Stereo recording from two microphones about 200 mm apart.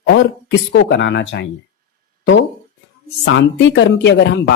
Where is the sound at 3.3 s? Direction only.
65° left (ahead or behind).